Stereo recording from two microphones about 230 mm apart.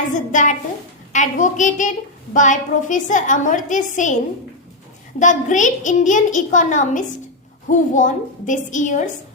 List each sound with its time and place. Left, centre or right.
0.1 s a woman's voice: left
5.2 s a woman's voice: left